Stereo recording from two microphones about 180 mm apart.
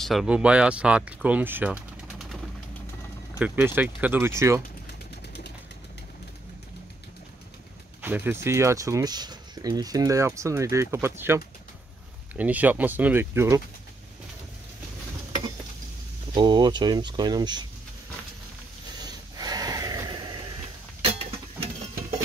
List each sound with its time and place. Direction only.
0.0 s speech: centre (ahead or behind)
8.0 s speech: 10° right (ahead or behind)
16.3 s speech: 25° right (ahead or behind)
19.0 s snort: 20° right (ahead or behind)